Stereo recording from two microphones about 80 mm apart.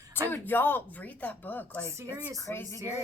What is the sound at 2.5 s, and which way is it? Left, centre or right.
Speech, left.